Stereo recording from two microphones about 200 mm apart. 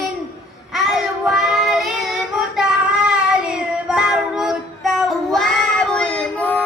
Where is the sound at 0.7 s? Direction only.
Centre (ahead or behind).